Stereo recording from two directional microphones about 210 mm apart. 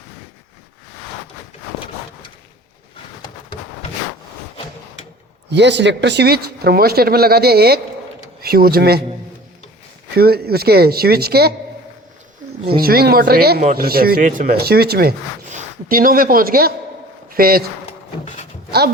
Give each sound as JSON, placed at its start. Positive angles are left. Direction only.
{"t": 5.5, "sound": "speech", "side_deg": -55}
{"t": 10.2, "sound": "speech", "side_deg": -50}
{"t": 12.6, "sound": "speech", "side_deg": -45}
{"t": 15.4, "sound": "speech", "side_deg": -40}